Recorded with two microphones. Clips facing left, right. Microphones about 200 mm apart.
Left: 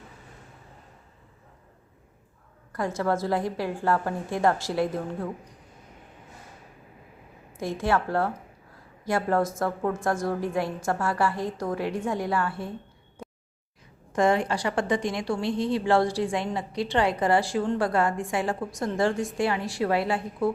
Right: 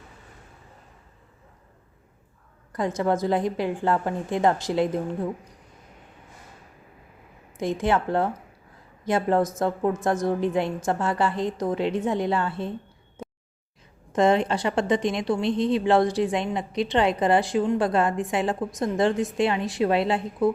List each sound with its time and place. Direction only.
2.7 s a woman's voice: 20° right (ahead or behind)
7.5 s a woman's voice: 20° right (ahead or behind)
13.2 s a sound: 20° right (ahead or behind)
14.1 s a woman's voice: 20° right (ahead or behind)